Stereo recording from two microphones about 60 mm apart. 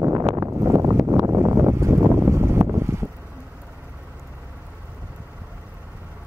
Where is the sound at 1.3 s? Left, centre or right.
Right.